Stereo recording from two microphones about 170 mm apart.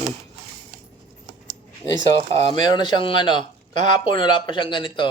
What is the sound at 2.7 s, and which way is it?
Speech, 25° left (ahead or behind).